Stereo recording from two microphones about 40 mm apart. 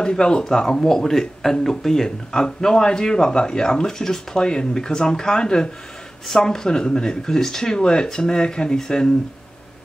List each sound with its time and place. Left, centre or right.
0.0 s speech: left